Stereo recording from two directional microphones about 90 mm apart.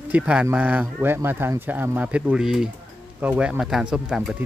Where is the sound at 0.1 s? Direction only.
15° right (ahead or behind).